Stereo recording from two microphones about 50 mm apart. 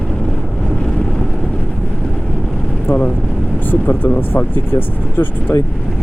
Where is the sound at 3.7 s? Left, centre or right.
Left.